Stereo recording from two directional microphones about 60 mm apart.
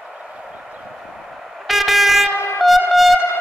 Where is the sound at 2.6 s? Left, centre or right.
Centre.